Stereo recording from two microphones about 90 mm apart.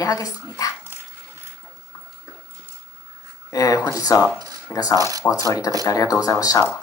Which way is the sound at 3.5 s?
40° left (ahead or behind).